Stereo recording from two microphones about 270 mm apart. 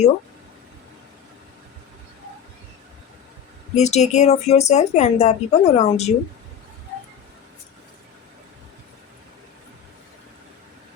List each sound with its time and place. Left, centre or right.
3.8 s a woman's voice: left